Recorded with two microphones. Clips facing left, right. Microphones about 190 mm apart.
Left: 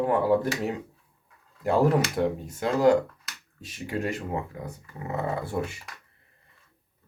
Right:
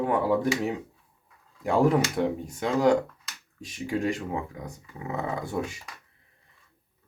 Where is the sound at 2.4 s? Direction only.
5° left (ahead or behind).